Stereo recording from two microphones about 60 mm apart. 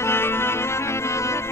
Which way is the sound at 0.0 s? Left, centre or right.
Left.